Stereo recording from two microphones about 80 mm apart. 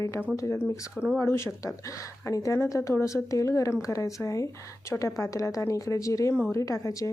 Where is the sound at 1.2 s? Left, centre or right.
Left.